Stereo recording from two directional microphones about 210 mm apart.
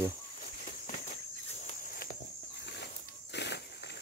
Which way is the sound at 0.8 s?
35° left (ahead or behind).